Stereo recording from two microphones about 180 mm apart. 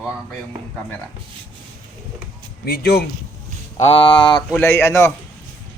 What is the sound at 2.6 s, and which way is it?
Speech, 55° left (ahead or behind).